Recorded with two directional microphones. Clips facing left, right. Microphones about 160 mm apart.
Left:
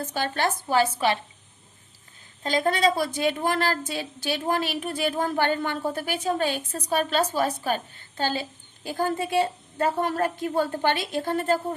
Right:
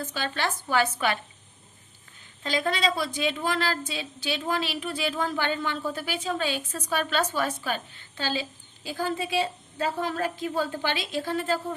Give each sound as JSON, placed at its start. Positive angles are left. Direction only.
{"t": 0.0, "sound": "speech", "side_deg": 50}
{"t": 2.4, "sound": "a woman's voice", "side_deg": 45}